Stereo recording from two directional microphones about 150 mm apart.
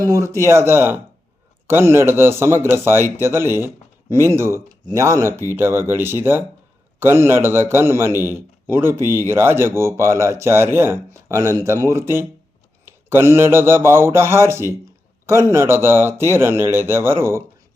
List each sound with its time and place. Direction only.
0.0 s a man's voice: 20° right (ahead or behind)